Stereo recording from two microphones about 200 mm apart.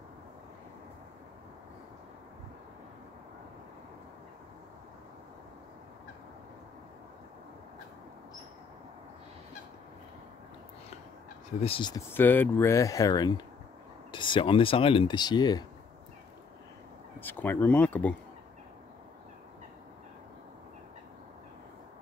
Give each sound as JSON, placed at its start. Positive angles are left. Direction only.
{"t": 11.6, "sound": "speech", "side_deg": 25}
{"t": 12.1, "sound": "speech", "side_deg": 10}
{"t": 17.2, "sound": "speech", "side_deg": 10}